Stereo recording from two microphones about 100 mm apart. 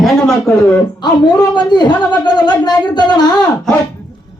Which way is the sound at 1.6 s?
45° left (ahead or behind).